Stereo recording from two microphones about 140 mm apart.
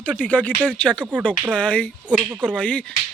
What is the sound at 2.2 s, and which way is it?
Speech, 10° right (ahead or behind).